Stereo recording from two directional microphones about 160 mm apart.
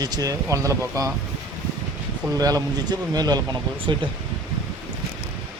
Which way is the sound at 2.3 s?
25° right (ahead or behind).